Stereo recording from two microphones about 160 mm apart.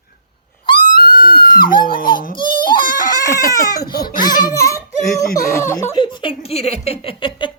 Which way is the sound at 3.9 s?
65° left (ahead or behind).